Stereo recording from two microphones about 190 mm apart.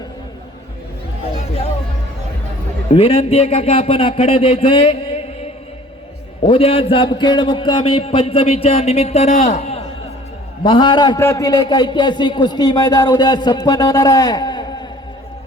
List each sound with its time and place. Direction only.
2.9 s a man's voice: 30° left (ahead or behind)
6.5 s a man's voice: 30° left (ahead or behind)